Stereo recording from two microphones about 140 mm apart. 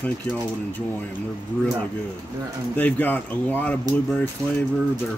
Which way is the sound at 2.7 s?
15° left (ahead or behind).